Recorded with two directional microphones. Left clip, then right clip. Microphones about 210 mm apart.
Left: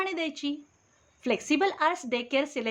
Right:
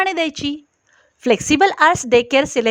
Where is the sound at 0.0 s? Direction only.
50° right (ahead or behind).